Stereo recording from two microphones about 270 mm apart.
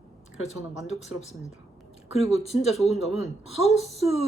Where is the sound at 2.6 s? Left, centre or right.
Centre.